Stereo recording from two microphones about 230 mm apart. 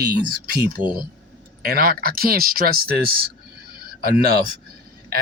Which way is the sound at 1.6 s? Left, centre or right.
Right.